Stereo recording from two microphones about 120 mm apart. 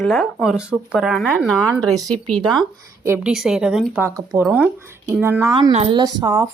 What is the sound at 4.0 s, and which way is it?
Speech, 20° right (ahead or behind).